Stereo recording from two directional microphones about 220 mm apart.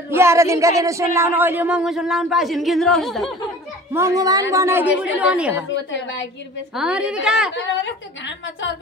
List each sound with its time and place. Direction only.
0.1 s speech: 10° right (ahead or behind)
3.9 s a woman's voice: 15° right (ahead or behind)
5.9 s a woman's voice: 55° left (ahead or behind)
6.7 s speech: 5° right (ahead or behind)
7.5 s a woman's voice: 55° left (ahead or behind)